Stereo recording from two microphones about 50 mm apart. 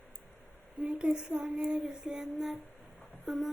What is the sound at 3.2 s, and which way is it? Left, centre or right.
Speech, centre.